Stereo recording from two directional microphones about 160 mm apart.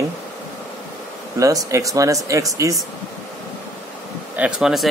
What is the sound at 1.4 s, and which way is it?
Speech, 20° right (ahead or behind).